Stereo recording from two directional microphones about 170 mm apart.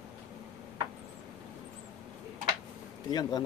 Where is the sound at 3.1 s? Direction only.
20° left (ahead or behind).